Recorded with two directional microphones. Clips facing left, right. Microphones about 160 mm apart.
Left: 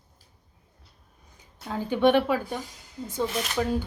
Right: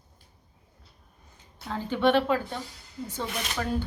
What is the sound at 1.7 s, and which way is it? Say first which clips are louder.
A woman's voice: left 2 dB; 15° left (ahead or behind).